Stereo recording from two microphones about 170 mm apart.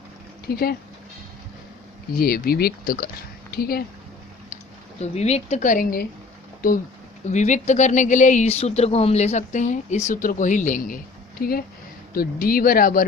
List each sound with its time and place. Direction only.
0.4 s speech: 65° left (ahead or behind)
2.1 s speech: 60° left (ahead or behind)
4.9 s speech: 40° left (ahead or behind); by 6.1 s 60° left (ahead or behind)
7.3 s speech: 45° left (ahead or behind)